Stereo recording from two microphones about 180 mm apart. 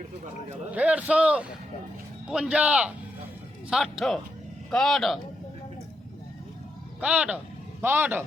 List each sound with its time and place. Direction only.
0.7 s a man's voice: 5° right (ahead or behind)
7.0 s a man's voice: 5° right (ahead or behind)